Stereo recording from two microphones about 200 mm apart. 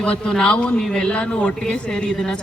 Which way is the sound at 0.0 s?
5° left (ahead or behind).